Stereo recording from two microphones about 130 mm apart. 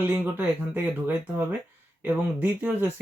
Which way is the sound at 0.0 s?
15° right (ahead or behind).